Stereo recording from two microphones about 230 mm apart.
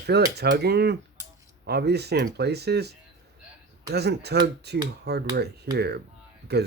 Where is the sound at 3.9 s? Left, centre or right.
Right.